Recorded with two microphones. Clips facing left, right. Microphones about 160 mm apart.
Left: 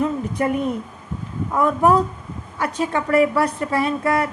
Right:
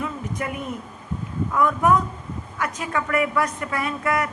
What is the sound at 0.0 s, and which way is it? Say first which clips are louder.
A woman's voice: left 8 dB; 35° left (ahead or behind).